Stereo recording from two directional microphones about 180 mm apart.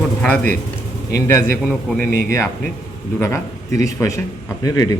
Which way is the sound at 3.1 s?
15° left (ahead or behind).